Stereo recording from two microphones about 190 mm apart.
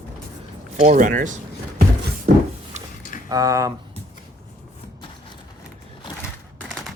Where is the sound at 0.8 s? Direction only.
45° right (ahead or behind).